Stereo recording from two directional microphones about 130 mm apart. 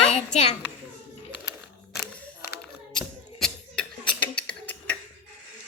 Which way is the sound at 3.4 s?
10° left (ahead or behind).